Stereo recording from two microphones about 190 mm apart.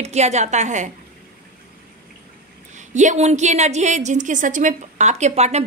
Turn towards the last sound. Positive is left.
turn(degrees=-35)  # may be behind; listen again after turning